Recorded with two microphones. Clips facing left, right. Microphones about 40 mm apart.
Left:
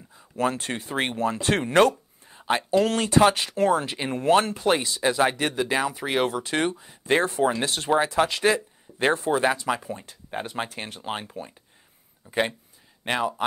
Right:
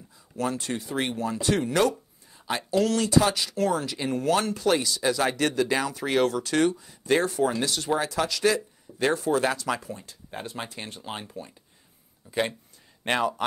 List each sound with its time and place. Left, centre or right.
0.4 s speech: left
9.9 s speech: left
13.0 s speech: centre